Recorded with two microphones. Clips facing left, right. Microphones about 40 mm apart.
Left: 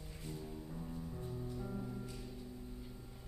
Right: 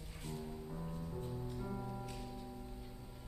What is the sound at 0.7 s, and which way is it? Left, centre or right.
Music, right.